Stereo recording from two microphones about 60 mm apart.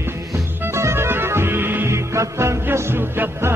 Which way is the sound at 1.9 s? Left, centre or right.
Right.